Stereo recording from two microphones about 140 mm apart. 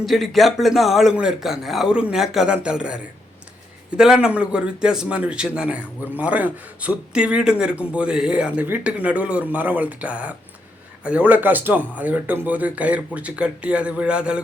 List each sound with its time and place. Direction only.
0.0 s speech: centre (ahead or behind)